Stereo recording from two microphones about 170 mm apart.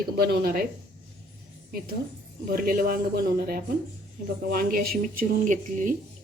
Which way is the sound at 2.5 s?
60° right (ahead or behind).